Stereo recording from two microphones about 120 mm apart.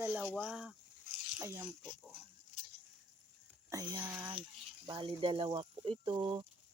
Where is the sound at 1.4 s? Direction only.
20° right (ahead or behind).